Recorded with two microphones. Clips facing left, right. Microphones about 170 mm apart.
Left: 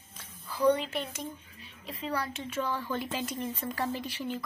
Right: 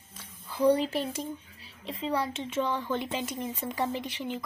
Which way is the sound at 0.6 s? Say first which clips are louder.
Right 2 dB; 35° right (ahead or behind).